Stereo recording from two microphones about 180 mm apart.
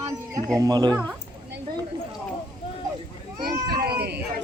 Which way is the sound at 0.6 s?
20° right (ahead or behind).